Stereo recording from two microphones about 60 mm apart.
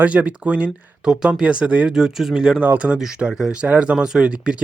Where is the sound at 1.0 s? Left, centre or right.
Centre.